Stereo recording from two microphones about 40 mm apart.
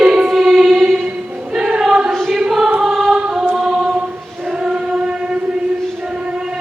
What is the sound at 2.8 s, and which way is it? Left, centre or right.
Choir, centre.